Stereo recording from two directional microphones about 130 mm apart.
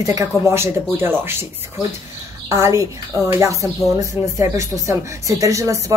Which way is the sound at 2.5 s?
25° right (ahead or behind).